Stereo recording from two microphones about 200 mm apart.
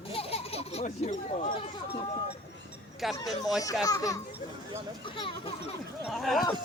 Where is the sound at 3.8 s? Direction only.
15° left (ahead or behind).